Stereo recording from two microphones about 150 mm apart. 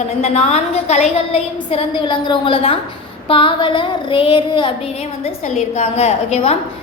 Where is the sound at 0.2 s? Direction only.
50° left (ahead or behind).